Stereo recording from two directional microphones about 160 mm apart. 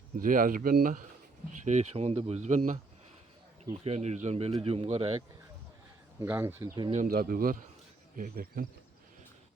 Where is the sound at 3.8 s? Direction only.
40° right (ahead or behind).